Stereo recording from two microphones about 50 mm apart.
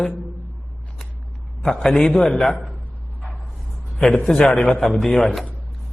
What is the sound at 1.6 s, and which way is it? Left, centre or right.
Speech, centre.